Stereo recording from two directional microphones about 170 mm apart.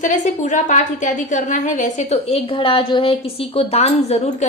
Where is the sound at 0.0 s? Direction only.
45° left (ahead or behind).